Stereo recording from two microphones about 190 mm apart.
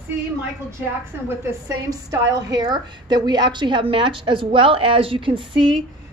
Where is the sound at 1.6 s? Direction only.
20° right (ahead or behind).